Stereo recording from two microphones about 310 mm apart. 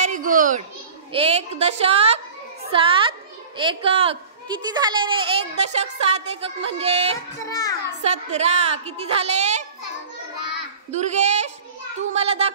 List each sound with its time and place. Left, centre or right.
0.0 s children playing: right
1.1 s a woman's voice: centre
7.4 s a child's voice: centre
8.0 s a woman's voice: right
10.4 s child singing: right
12.1 s a child's voice: centre